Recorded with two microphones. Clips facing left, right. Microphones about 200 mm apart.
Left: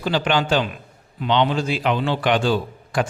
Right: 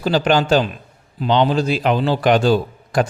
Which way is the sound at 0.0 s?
40° right (ahead or behind).